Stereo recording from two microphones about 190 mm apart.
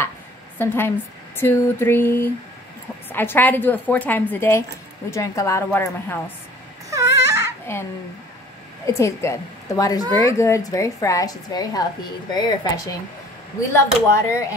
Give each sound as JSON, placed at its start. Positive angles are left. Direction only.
{"t": 0.6, "sound": "a woman's voice", "side_deg": 10}
{"t": 6.9, "sound": "baby cry", "side_deg": -15}
{"t": 7.7, "sound": "a woman's voice", "side_deg": 15}